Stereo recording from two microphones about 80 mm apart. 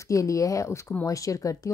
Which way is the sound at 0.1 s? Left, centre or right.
Left.